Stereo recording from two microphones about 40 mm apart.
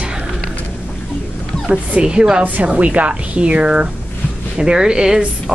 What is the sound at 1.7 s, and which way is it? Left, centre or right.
Speech, right.